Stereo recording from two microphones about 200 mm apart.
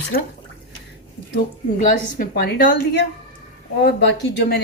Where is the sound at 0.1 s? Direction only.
45° left (ahead or behind).